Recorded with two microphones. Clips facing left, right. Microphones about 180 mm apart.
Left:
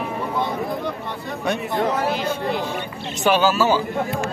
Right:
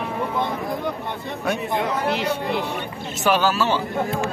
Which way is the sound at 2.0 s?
70° right (ahead or behind).